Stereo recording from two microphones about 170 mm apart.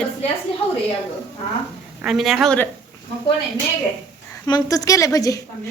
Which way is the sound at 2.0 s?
Centre (ahead or behind).